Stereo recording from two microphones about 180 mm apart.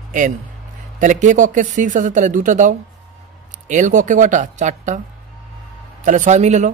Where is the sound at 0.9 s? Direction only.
45° right (ahead or behind).